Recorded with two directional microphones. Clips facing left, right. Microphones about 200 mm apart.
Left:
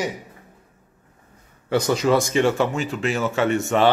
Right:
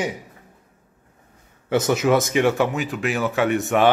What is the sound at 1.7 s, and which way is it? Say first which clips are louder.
Speech: right 1 dB; 20° right (ahead or behind).